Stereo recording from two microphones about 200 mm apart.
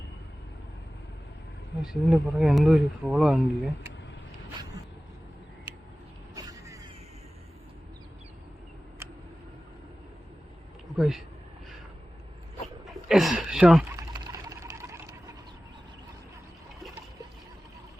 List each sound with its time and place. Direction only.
1.8 s speech: 5° right (ahead or behind)
6.3 s creak: 15° right (ahead or behind)
10.9 s speech: centre (ahead or behind)
13.1 s speech: centre (ahead or behind)
13.9 s sewing machine: 20° right (ahead or behind)